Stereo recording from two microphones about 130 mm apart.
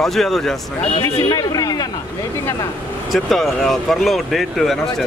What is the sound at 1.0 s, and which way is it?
Speech, 30° left (ahead or behind).